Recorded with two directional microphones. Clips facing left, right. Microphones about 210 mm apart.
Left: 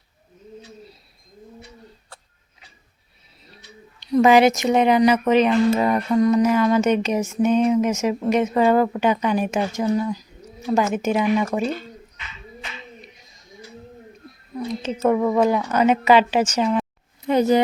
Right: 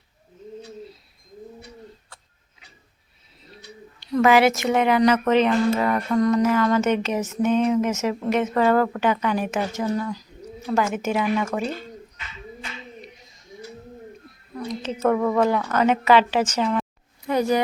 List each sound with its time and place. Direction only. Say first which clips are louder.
4.0 s speech: left 3 dB; 15° left (ahead or behind)
14.5 s speech: left 3 dB; 10° left (ahead or behind)
17.2 s a sound: left 4 dB; 25° left (ahead or behind)